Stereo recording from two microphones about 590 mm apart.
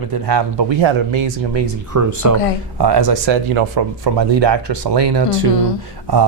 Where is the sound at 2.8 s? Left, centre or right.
Right.